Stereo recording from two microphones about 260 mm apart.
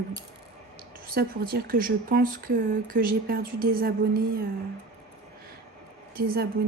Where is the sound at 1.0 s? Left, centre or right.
Right.